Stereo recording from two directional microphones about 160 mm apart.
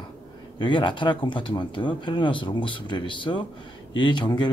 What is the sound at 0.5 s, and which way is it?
Speech, 30° left (ahead or behind).